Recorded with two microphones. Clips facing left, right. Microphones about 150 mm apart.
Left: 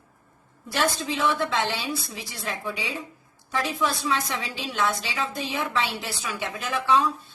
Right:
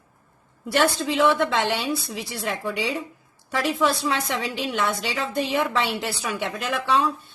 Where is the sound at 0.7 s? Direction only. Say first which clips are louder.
Right 4 dB; 65° right (ahead or behind).